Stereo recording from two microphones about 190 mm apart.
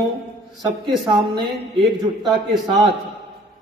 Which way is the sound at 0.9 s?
25° right (ahead or behind).